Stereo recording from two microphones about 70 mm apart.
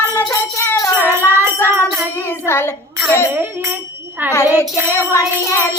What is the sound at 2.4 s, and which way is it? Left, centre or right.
Music, left.